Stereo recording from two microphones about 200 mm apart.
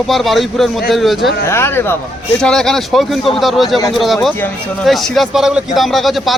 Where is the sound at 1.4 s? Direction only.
10° left (ahead or behind).